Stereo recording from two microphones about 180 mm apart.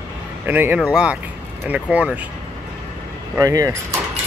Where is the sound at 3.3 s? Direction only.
20° right (ahead or behind).